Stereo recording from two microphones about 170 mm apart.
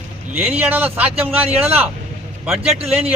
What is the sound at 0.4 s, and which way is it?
Speech, 10° right (ahead or behind).